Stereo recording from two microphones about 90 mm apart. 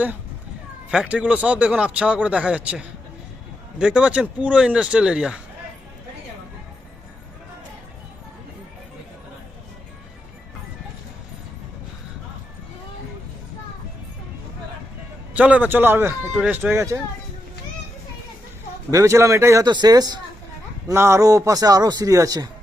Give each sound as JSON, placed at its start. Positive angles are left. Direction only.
{"t": 0.9, "sound": "a man's voice", "side_deg": -10}
{"t": 15.3, "sound": "a man's voice", "side_deg": -15}
{"t": 16.7, "sound": "a man's voice", "side_deg": -30}
{"t": 18.9, "sound": "a man's voice", "side_deg": -35}
{"t": 19.6, "sound": "speech", "side_deg": -50}
{"t": 20.9, "sound": "a man's voice", "side_deg": -30}